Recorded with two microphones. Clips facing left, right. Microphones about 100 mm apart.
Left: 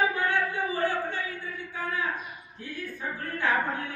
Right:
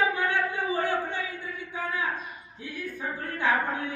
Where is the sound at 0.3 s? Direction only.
20° right (ahead or behind).